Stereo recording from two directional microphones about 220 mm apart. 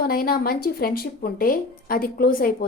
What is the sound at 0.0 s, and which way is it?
Speech, 45° left (ahead or behind).